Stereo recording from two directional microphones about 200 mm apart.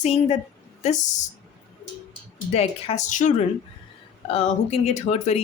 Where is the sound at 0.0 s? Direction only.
30° left (ahead or behind).